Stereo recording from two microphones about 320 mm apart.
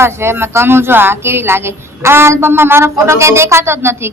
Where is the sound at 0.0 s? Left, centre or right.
Centre.